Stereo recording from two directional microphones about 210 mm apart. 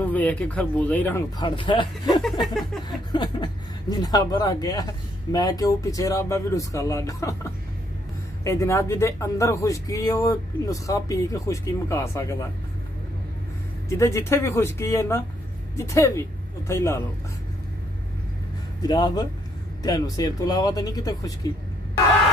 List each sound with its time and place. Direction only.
0.0 s speech: 10° left (ahead or behind)
1.4 s speech: 20° left (ahead or behind)
2.4 s a sound: centre (ahead or behind)
2.9 s speech: 20° left (ahead or behind)
13.8 s speech: 15° left (ahead or behind)
18.8 s speech: 20° left (ahead or behind)